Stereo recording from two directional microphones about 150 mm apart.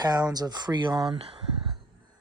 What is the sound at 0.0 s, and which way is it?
Speech, 25° right (ahead or behind).